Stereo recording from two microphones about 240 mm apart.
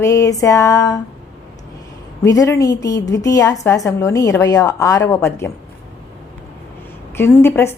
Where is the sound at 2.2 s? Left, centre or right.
Centre.